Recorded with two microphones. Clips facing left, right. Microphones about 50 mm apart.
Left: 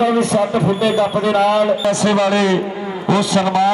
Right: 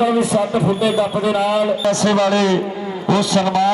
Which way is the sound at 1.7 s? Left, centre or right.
Centre.